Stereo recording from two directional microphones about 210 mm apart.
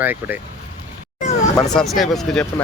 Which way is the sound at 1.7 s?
Centre (ahead or behind).